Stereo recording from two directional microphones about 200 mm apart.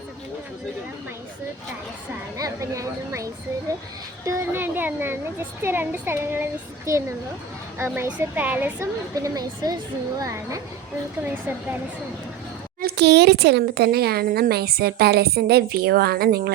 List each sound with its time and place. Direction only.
2.4 s a child's voice: 15° right (ahead or behind)
4.3 s a child's voice: 10° right (ahead or behind)
12.8 s speech: 55° right (ahead or behind)